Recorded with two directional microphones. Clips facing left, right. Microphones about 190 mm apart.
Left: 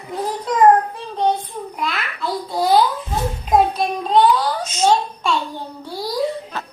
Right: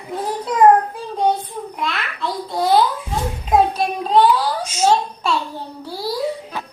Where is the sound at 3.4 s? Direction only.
5° right (ahead or behind).